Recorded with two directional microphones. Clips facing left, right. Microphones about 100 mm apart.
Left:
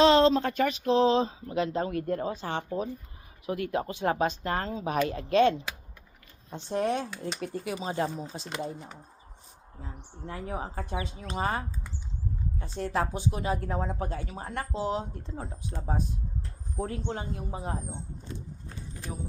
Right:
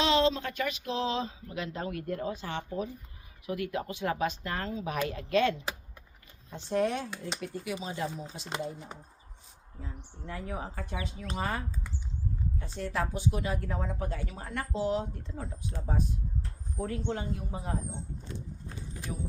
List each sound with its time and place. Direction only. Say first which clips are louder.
0.0 s speech: left 6 dB; 40° left (ahead or behind); by 7.1 s 25° left (ahead or behind)
7.3 s speech: left 2 dB; 35° left (ahead or behind)
8.4 s speech: right 2 dB; 25° right (ahead or behind)
9.8 s speech: left 2 dB; 30° left (ahead or behind)
16.8 s speech: even; 30° left (ahead or behind)
18.3 s keys jangling: even; centre (ahead or behind)